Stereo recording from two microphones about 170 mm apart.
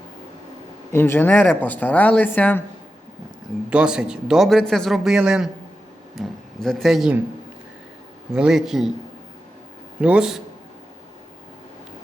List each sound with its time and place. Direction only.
0.9 s speech: 15° left (ahead or behind)
3.7 s a man's voice: 5° right (ahead or behind)
8.3 s a man's voice: 5° right (ahead or behind)
10.0 s a man's voice: 5° right (ahead or behind)